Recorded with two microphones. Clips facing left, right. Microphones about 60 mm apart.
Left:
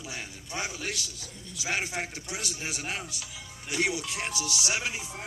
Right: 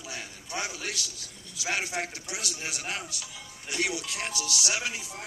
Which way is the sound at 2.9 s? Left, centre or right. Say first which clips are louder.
Even; left.